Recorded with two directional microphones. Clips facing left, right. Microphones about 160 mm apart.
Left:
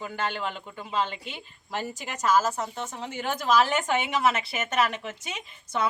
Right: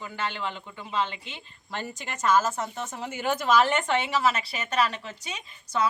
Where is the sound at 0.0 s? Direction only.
45° left (ahead or behind).